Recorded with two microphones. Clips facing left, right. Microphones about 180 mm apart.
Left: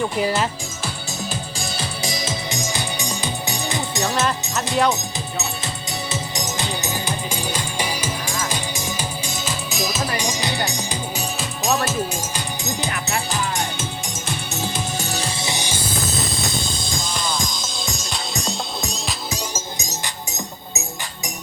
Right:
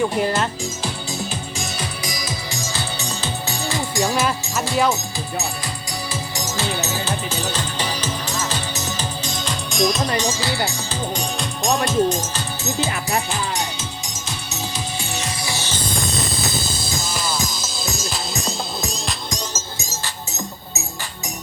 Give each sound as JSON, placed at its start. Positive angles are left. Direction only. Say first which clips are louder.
{"t": 0.2, "sound": "speech", "louder": "even", "side_deg": 5}
{"t": 1.5, "sound": "music", "louder": "even", "side_deg": 30}
{"t": 4.0, "sound": "speech", "louder": "right 1 dB", "side_deg": 0}
{"t": 6.1, "sound": "music", "louder": "left 1 dB", "side_deg": 20}
{"t": 11.2, "sound": "music", "louder": "right 2 dB", "side_deg": 5}
{"t": 11.9, "sound": "speech", "louder": "right 6 dB", "side_deg": 10}
{"t": 13.6, "sound": "music", "louder": "left 1 dB", "side_deg": 55}
{"t": 15.4, "sound": "music", "louder": "left 1 dB", "side_deg": 20}